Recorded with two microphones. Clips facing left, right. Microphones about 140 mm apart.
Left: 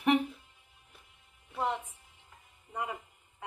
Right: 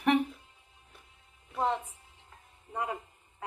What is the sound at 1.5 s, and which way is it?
Music, 25° right (ahead or behind).